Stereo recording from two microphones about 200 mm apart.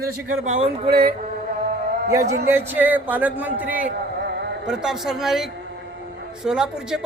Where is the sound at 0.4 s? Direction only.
35° right (ahead or behind).